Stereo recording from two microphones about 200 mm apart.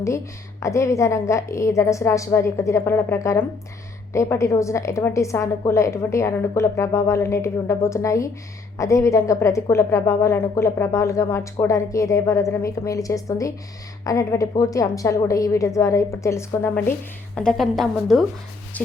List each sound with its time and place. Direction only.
0.6 s a woman's voice: 15° left (ahead or behind)